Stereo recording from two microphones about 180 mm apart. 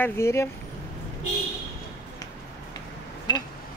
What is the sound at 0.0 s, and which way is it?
Speech, 15° left (ahead or behind).